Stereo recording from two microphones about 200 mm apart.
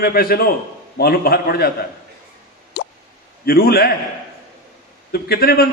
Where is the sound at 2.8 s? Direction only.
55° left (ahead or behind).